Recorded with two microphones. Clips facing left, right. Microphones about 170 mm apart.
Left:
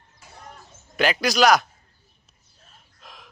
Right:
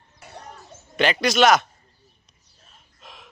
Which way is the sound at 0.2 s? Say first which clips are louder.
Right 6 dB; 65° right (ahead or behind).